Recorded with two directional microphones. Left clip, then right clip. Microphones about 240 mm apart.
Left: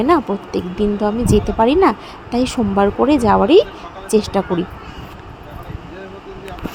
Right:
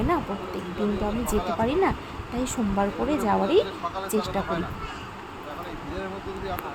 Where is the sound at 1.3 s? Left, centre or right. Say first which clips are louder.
Left 11 dB; left.